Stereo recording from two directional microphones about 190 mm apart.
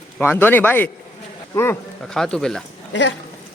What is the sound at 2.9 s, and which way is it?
Speech, 70° left (ahead or behind).